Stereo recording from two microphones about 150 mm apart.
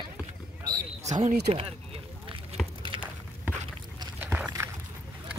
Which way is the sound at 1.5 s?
40° right (ahead or behind).